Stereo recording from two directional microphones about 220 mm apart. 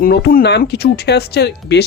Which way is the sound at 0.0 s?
40° left (ahead or behind).